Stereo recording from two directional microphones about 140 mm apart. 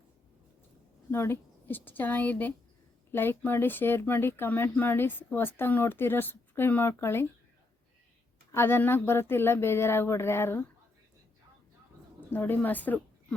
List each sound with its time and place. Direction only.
1.1 s speech: 15° left (ahead or behind)
8.5 s speech: 15° left (ahead or behind)
12.3 s speech: 15° left (ahead or behind)